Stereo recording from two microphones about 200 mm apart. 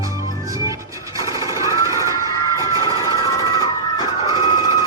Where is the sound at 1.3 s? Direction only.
15° right (ahead or behind).